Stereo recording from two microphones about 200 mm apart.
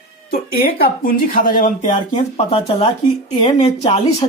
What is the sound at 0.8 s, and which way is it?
Speech, 45° left (ahead or behind).